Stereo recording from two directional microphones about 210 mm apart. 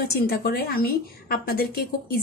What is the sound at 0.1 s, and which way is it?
A woman's voice, 50° left (ahead or behind).